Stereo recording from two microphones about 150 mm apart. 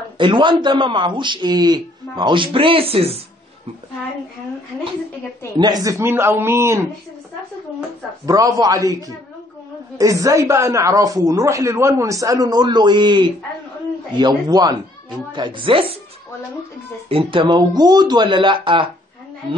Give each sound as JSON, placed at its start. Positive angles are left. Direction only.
{"t": 0.2, "sound": "a man's voice", "side_deg": -30}
{"t": 5.6, "sound": "a man's voice", "side_deg": -25}
{"t": 8.3, "sound": "a man's voice", "side_deg": -25}
{"t": 17.1, "sound": "a man's voice", "side_deg": -35}